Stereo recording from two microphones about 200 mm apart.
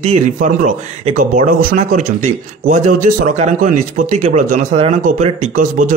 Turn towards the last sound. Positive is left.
turn(degrees=-40)  # may be behind; listen again after turning